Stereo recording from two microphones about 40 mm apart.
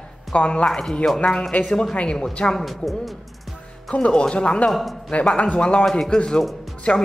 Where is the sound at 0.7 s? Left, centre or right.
Centre.